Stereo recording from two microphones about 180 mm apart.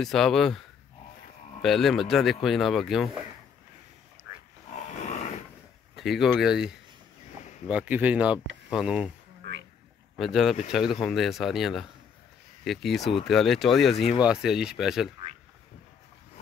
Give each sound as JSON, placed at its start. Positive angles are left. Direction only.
{"t": 0.0, "sound": "speech", "side_deg": 0}
{"t": 1.6, "sound": "speech", "side_deg": 0}
{"t": 4.3, "sound": "wild animals", "side_deg": -15}
{"t": 5.9, "sound": "speech", "side_deg": 0}
{"t": 9.4, "sound": "a sound", "side_deg": -80}
{"t": 10.1, "sound": "speech", "side_deg": 0}